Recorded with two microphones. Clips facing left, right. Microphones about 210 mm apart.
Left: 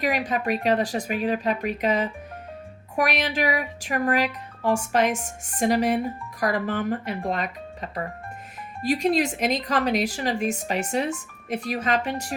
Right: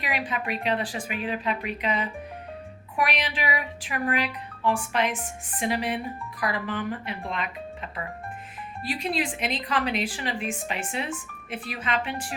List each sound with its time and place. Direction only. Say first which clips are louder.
0.0 s speech: left 6 dB; 45° left (ahead or behind)